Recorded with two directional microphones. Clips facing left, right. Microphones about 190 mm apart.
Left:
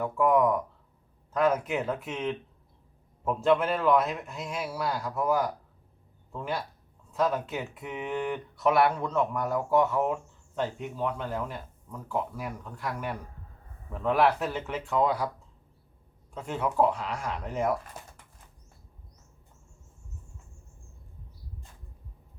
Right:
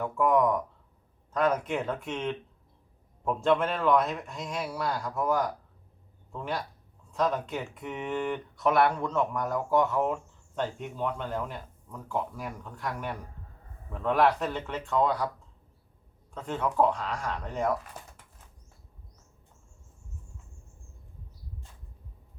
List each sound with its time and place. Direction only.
0.0 s speech: centre (ahead or behind)
16.3 s speech: 10° left (ahead or behind)